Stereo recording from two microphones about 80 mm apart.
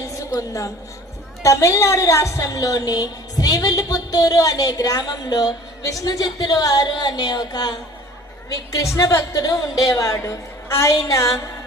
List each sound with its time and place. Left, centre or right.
0.3 s a woman's voice: left
9.0 s a woman's voice: left
10.2 s a woman's voice: left